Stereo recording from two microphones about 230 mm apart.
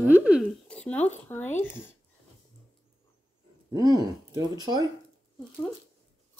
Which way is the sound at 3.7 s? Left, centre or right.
Centre.